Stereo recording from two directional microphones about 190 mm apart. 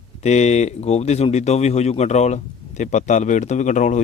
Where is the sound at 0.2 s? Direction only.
35° left (ahead or behind).